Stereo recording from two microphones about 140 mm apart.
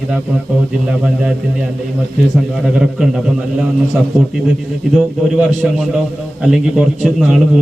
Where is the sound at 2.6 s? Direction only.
5° right (ahead or behind).